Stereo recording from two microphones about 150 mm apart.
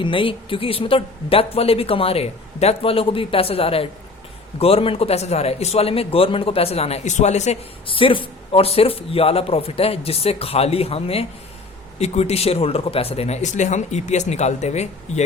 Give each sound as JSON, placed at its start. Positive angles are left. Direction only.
{"t": 0.0, "sound": "a man's voice", "side_deg": 35}